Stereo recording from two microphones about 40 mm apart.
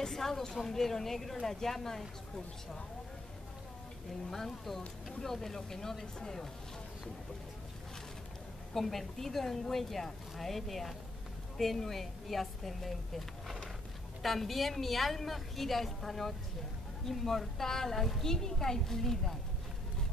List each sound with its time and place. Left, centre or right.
0.0 s a woman's voice: centre
4.3 s a woman's voice: centre
8.7 s a woman's voice: centre